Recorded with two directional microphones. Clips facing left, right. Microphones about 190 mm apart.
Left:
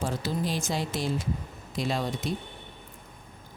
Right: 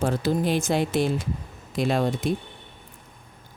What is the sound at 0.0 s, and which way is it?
Speech, 55° right (ahead or behind).